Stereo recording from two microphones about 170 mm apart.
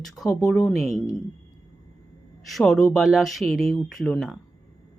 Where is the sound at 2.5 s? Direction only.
Centre (ahead or behind).